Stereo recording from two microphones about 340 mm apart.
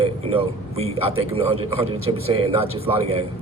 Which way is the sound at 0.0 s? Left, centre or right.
Centre.